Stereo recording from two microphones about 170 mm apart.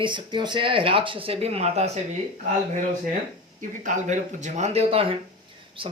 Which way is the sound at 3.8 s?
45° right (ahead or behind).